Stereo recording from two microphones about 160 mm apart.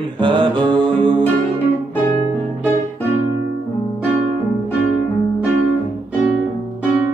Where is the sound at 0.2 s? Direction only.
30° right (ahead or behind).